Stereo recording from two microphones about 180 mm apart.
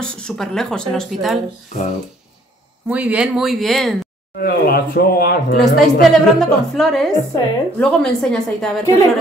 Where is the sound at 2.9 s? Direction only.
10° right (ahead or behind).